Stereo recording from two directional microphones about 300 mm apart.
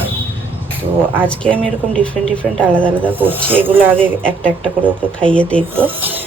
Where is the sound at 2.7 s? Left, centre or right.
Centre.